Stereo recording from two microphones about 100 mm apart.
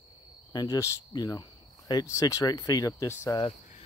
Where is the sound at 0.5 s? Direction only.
35° left (ahead or behind).